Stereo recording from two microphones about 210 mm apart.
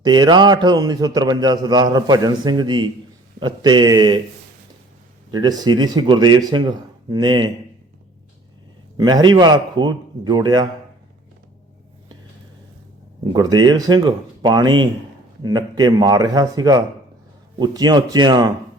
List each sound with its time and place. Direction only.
0.0 s a man's voice: 20° right (ahead or behind)
5.3 s a man's voice: 20° right (ahead or behind)
9.0 s a man's voice: 20° right (ahead or behind)
13.3 s a man's voice: 20° right (ahead or behind)